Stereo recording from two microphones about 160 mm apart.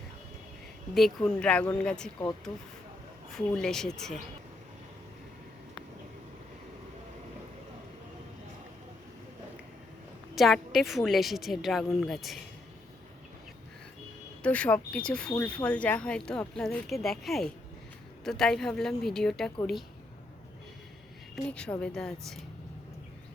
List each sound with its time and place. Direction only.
0.9 s speech: 5° left (ahead or behind)
3.3 s speech: 5° left (ahead or behind)
10.3 s speech: centre (ahead or behind)
14.4 s speech: 10° left (ahead or behind)
21.5 s speech: 5° left (ahead or behind)